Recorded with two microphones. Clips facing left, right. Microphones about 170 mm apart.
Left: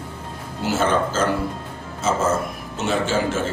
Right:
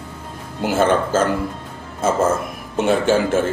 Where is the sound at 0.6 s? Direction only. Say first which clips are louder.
Right 3 dB; 50° right (ahead or behind).